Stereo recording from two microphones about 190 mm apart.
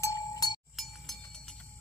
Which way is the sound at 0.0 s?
20° left (ahead or behind).